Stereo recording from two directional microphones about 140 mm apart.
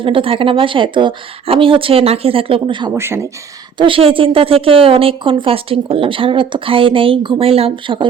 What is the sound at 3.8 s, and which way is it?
A woman's voice, 40° right (ahead or behind).